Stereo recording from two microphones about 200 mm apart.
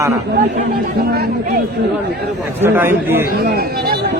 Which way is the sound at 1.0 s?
50° right (ahead or behind).